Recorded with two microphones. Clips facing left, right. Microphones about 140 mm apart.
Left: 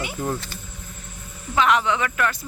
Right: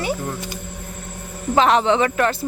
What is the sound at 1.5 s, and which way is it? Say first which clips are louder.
Speech: right 4 dB; 35° right (ahead or behind).